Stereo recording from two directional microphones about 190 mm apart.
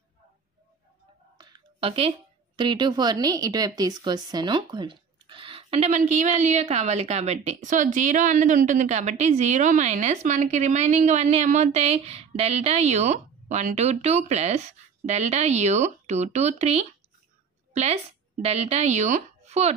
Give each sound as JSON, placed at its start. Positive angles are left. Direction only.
{"t": 1.4, "sound": "a woman's voice", "side_deg": -25}